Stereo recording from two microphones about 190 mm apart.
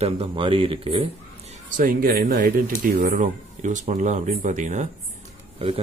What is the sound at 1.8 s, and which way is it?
Speech, 50° right (ahead or behind).